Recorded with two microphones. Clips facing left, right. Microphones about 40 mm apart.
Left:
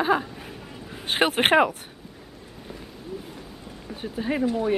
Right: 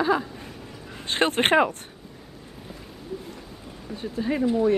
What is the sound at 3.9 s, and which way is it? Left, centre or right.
Speech, centre.